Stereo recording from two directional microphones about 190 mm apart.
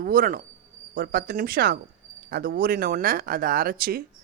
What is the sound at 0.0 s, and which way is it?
Speech, 45° right (ahead or behind).